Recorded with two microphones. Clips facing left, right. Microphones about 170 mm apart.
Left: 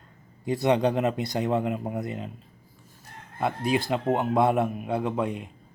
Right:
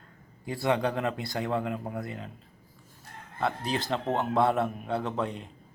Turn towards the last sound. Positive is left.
turn(degrees=10)  # may be behind; listen again after turning